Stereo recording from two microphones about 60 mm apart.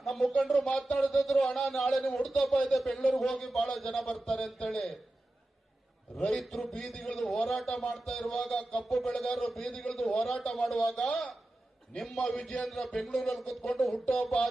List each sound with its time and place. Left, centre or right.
0.0 s a sound: centre
0.3 s a man's voice: centre
6.1 s a man's voice: centre